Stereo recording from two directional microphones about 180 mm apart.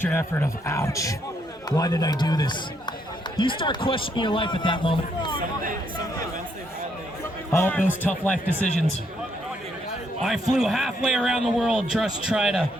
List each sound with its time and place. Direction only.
0.0 s speech: 10° left (ahead or behind); by 5.4 s 25° left (ahead or behind)
7.5 s speech: 10° left (ahead or behind)
10.2 s a man's voice: centre (ahead or behind)